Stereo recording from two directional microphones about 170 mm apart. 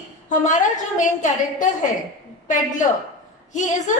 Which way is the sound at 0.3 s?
45° left (ahead or behind).